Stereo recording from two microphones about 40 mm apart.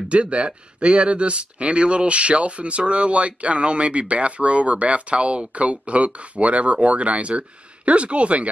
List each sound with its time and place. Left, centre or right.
0.1 s speech: right